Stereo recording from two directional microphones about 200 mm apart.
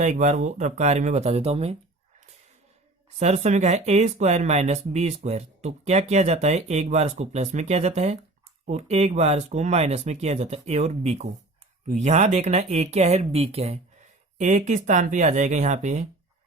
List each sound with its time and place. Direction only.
0.0 s speech: 35° right (ahead or behind)
3.2 s speech: 35° right (ahead or behind)